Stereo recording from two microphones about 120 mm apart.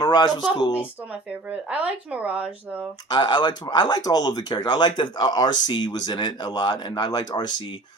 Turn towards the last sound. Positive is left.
turn(degrees=35)  # may be behind; listen again after turning